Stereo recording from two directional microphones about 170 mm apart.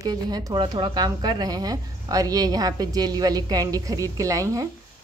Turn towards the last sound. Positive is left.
turn(degrees=-20)  # may be behind; listen again after turning